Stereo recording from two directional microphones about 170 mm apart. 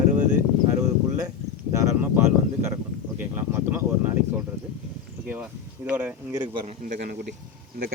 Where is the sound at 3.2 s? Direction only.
10° right (ahead or behind).